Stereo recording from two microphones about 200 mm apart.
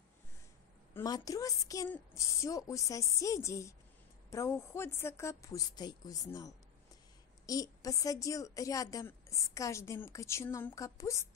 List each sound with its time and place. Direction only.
0.9 s a woman's voice: 20° left (ahead or behind)